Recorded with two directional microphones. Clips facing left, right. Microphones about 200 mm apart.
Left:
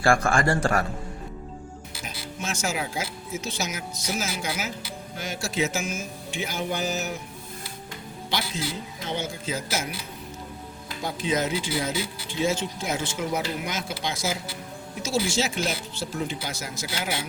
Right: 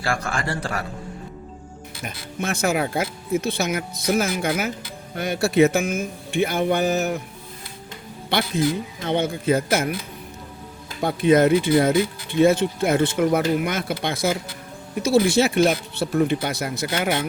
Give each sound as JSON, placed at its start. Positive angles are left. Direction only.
{"t": 0.0, "sound": "a man's voice", "side_deg": 50}
{"t": 2.4, "sound": "speech", "side_deg": -60}
{"t": 8.3, "sound": "speech", "side_deg": -60}
{"t": 11.0, "sound": "speech", "side_deg": -60}